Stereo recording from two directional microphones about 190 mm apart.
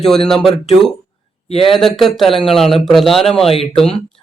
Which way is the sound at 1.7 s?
Centre (ahead or behind).